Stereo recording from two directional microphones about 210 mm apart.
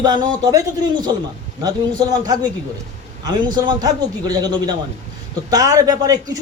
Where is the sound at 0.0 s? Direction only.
20° right (ahead or behind).